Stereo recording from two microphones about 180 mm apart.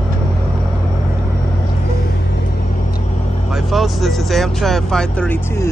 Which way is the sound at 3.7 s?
Centre (ahead or behind).